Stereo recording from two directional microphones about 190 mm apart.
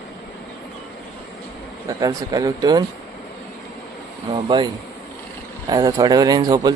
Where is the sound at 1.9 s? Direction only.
20° right (ahead or behind).